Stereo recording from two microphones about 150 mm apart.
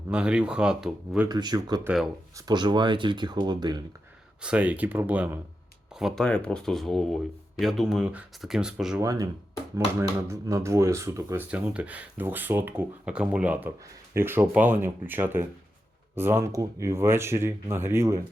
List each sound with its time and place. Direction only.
0.1 s speech: 5° right (ahead or behind)
1.3 s speech: 30° right (ahead or behind)
1.8 s speech: 5° right (ahead or behind)
2.3 s speech: 30° right (ahead or behind)
4.4 s speech: 10° right (ahead or behind)
9.0 s speech: 25° right (ahead or behind)